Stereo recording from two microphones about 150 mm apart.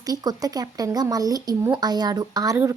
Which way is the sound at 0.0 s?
25° right (ahead or behind).